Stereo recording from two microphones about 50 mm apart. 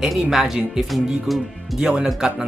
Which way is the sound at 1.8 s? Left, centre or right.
Centre.